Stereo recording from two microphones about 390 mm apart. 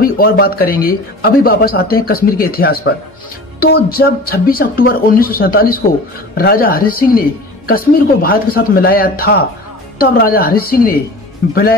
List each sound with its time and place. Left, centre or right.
0.2 s a woman's voice: left